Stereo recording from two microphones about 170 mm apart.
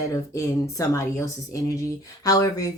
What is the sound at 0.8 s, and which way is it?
A woman's voice, 20° left (ahead or behind).